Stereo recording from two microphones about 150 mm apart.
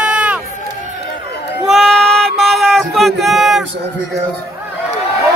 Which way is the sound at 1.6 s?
Centre (ahead or behind).